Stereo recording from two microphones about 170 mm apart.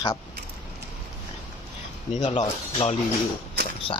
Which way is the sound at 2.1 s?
40° left (ahead or behind).